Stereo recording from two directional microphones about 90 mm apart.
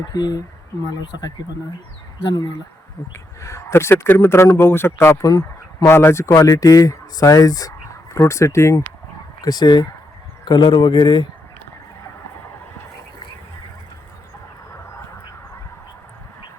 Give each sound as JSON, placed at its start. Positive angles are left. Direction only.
{"t": 0.1, "sound": "speech", "side_deg": 45}
{"t": 3.1, "sound": "speech", "side_deg": 30}
{"t": 9.4, "sound": "speech", "side_deg": 50}
{"t": 10.4, "sound": "speech", "side_deg": 60}